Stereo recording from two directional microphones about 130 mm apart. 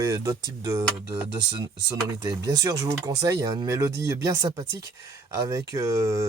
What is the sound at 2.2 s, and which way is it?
Speech, 30° right (ahead or behind).